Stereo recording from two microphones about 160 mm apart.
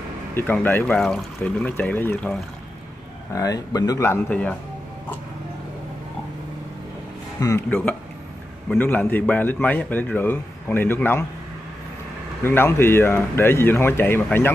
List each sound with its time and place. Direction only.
0.3 s a man's voice: 10° left (ahead or behind)
3.3 s speech: 20° left (ahead or behind)
7.3 s a man's voice: 20° left (ahead or behind)
12.4 s a man's voice: 15° left (ahead or behind)